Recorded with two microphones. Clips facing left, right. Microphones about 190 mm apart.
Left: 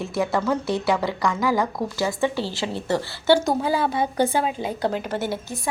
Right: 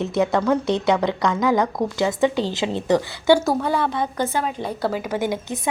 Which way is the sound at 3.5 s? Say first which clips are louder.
Right 1 dB; 5° left (ahead or behind).